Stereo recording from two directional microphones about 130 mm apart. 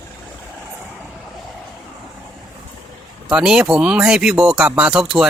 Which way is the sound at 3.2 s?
5° right (ahead or behind).